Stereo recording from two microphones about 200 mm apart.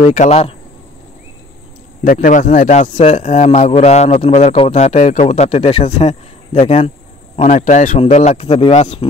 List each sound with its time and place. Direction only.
0.0 s a man's voice: 35° left (ahead or behind)
2.0 s a man's voice: 40° left (ahead or behind)